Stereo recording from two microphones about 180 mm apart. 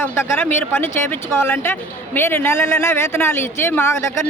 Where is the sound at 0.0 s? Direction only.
10° left (ahead or behind).